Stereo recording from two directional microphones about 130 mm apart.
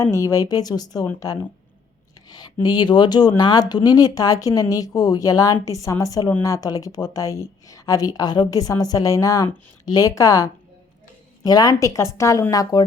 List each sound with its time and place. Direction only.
0.0 s speech: 20° left (ahead or behind)